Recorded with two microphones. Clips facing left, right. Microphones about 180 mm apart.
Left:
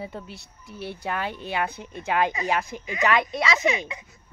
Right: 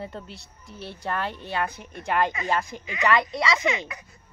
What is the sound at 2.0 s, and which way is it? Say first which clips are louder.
A woman's voice: left 1 dB; 10° left (ahead or behind).